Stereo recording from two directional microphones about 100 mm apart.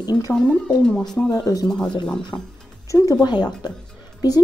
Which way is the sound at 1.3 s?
35° left (ahead or behind).